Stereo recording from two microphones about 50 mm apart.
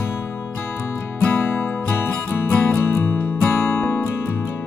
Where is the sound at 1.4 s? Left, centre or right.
Left.